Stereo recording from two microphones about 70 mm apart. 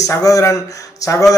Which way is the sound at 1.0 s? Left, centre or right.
Left.